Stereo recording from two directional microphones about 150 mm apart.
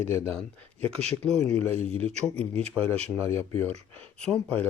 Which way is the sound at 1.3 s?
45° right (ahead or behind).